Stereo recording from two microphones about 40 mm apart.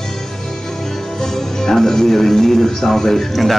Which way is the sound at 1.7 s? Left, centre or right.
Centre.